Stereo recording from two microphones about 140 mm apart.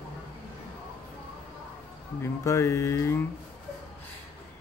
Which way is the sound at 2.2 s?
20° left (ahead or behind).